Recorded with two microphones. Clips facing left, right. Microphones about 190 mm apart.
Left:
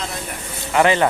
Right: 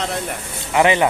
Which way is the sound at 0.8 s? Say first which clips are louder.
Even; 15° right (ahead or behind).